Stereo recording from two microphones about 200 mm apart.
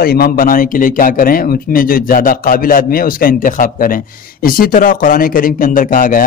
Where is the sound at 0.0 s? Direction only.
50° left (ahead or behind).